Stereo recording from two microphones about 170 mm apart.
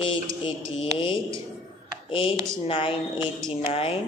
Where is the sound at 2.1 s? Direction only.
30° left (ahead or behind).